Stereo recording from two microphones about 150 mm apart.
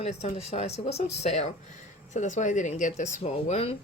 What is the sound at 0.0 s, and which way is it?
Speech, 50° left (ahead or behind).